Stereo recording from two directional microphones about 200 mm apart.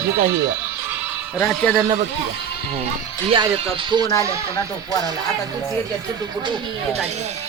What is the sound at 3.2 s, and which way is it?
Speech, 25° right (ahead or behind).